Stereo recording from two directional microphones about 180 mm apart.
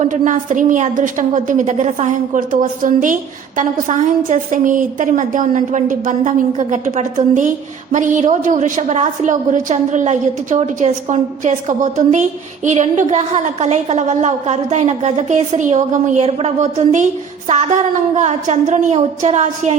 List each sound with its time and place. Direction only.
0.0 s a woman's voice: 45° right (ahead or behind)